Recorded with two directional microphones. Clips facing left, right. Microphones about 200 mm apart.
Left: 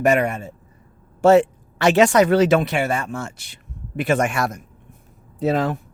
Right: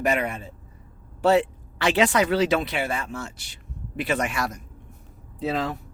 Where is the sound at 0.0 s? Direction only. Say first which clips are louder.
Left 6 dB; 50° left (ahead or behind).